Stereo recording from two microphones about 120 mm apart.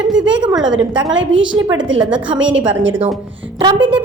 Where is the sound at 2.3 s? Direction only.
45° right (ahead or behind).